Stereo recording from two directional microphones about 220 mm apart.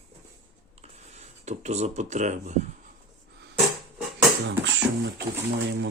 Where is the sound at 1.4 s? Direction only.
30° right (ahead or behind).